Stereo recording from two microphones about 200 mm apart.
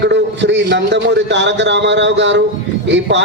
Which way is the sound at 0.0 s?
60° right (ahead or behind).